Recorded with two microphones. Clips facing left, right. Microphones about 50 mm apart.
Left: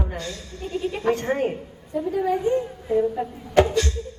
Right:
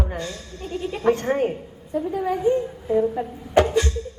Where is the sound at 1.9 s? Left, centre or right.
Centre.